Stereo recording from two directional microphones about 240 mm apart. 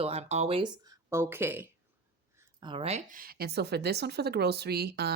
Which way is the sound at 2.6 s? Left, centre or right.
Right.